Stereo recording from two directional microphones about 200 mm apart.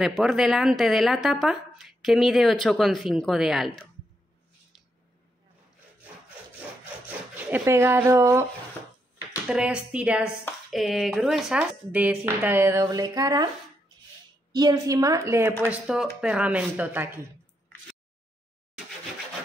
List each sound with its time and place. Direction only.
0.0 s speech: centre (ahead or behind)
7.5 s speech: 10° right (ahead or behind)
9.5 s speech: 5° right (ahead or behind)
14.5 s speech: 20° right (ahead or behind)